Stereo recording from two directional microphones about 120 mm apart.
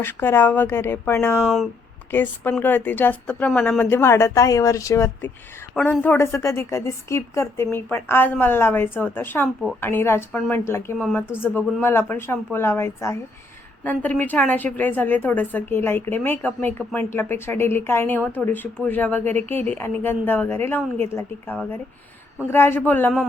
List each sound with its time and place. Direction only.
0.0 s a woman's voice: 20° left (ahead or behind)
13.8 s a woman's voice: 15° left (ahead or behind)